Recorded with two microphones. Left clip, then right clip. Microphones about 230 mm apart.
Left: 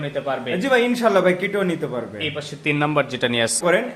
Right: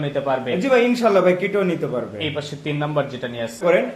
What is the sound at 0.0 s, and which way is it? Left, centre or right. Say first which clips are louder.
Speech: right 3 dB; centre.